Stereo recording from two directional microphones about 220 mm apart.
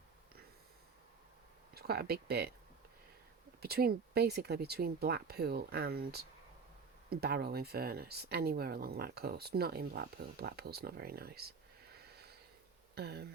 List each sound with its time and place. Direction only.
1.7 s speech: 45° right (ahead or behind)
3.6 s speech: 45° right (ahead or behind)
13.0 s speech: 45° right (ahead or behind)